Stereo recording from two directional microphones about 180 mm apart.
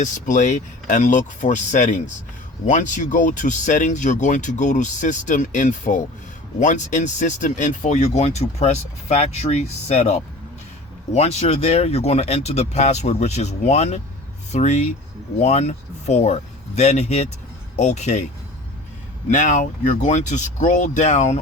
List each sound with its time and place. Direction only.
0.0 s speech: 45° left (ahead or behind)
11.1 s speech: 35° left (ahead or behind)
19.3 s speech: 45° left (ahead or behind)